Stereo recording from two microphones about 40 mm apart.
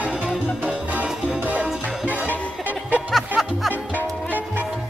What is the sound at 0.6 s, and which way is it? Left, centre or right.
Music, right.